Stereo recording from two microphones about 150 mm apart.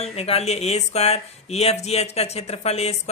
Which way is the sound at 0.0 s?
45° left (ahead or behind).